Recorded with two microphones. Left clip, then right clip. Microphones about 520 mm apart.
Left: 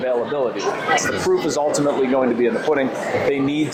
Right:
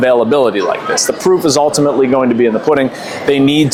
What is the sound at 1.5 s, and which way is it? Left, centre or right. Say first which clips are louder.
Speech: right 8 dB; right.